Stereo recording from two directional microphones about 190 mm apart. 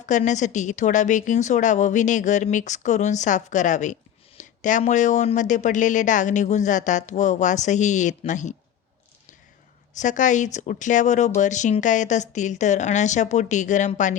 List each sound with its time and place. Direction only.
0.0 s speech: 40° left (ahead or behind)
9.9 s speech: 40° left (ahead or behind)